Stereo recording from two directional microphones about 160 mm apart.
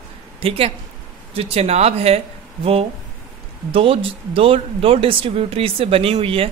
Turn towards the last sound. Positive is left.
turn(degrees=-35)  # may be behind; listen again after turning